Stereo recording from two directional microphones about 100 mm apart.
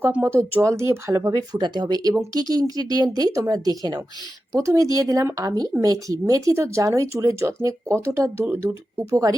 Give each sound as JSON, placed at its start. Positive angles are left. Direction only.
{"t": 0.0, "sound": "speech", "side_deg": -20}
{"t": 9.0, "sound": "speech", "side_deg": -35}